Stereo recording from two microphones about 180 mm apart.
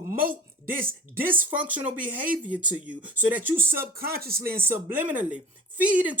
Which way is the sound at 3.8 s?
55° right (ahead or behind).